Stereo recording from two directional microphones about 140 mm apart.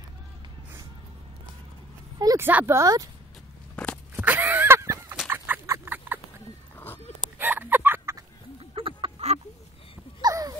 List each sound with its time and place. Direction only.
2.1 s vehicle: 25° right (ahead or behind)
2.4 s speech: 15° right (ahead or behind)
3.7 s walk: 10° left (ahead or behind)
4.1 s a sound: 10° right (ahead or behind)
7.3 s chicken: 15° right (ahead or behind)
8.5 s chicken: 40° right (ahead or behind)
10.2 s a sound: 25° right (ahead or behind)